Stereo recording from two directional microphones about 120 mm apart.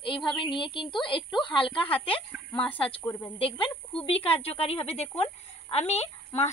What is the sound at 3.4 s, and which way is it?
A woman's voice, 50° left (ahead or behind).